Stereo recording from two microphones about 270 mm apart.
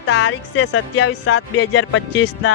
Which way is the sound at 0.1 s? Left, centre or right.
Left.